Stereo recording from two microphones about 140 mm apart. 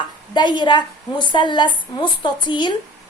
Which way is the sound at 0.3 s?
35° left (ahead or behind).